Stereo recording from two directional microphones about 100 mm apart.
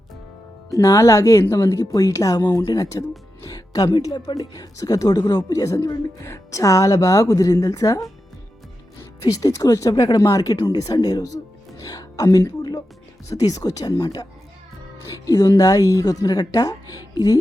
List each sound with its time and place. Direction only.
0.7 s speech: 30° left (ahead or behind)
9.2 s a woman's voice: 35° left (ahead or behind)
13.9 s speech: 50° left (ahead or behind)
15.1 s speech: 35° left (ahead or behind)